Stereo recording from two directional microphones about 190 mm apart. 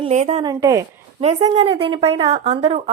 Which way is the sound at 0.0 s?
35° right (ahead or behind).